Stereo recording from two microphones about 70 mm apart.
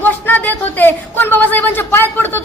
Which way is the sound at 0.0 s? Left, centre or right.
Left.